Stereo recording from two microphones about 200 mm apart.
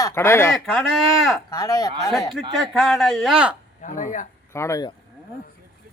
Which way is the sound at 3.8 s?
40° left (ahead or behind).